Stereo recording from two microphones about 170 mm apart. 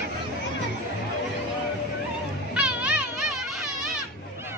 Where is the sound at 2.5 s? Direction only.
5° right (ahead or behind).